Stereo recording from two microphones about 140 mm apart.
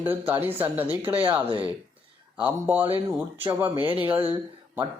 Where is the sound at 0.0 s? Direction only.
15° right (ahead or behind).